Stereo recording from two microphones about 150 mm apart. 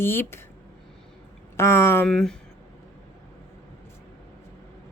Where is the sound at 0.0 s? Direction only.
15° left (ahead or behind).